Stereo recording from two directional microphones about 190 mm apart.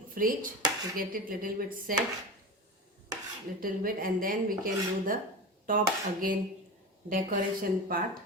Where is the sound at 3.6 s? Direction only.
50° right (ahead or behind).